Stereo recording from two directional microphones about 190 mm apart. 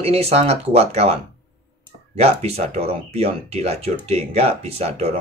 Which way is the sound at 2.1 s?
35° right (ahead or behind).